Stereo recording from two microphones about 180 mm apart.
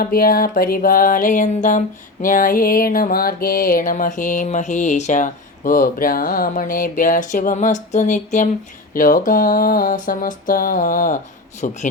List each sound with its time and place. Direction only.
0.0 s music: 55° left (ahead or behind)